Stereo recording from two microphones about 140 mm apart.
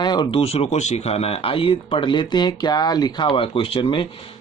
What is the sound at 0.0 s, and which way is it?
Speech, 30° left (ahead or behind).